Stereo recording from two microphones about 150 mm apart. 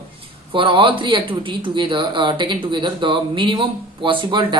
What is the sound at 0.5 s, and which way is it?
Speech, 35° right (ahead or behind).